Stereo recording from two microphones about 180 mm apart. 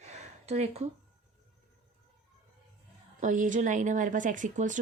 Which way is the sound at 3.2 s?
45° right (ahead or behind).